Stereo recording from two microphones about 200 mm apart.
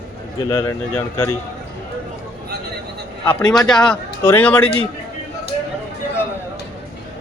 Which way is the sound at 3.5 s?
5° left (ahead or behind).